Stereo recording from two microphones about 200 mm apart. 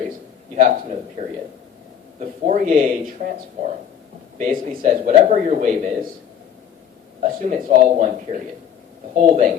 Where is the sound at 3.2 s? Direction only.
50° right (ahead or behind).